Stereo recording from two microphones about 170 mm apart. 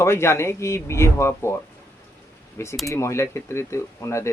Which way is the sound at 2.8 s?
15° left (ahead or behind).